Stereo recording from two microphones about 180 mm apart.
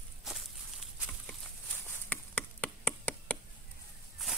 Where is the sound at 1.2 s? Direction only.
5° left (ahead or behind).